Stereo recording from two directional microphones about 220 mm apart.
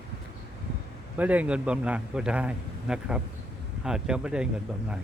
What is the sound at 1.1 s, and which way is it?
A man's voice, 5° right (ahead or behind).